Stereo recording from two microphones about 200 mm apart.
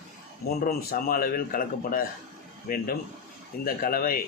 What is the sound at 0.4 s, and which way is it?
Speech, 50° left (ahead or behind).